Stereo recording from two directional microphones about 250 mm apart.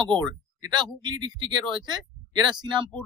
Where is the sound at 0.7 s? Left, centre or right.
Centre.